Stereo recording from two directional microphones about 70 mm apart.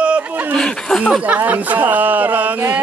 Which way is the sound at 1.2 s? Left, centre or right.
Right.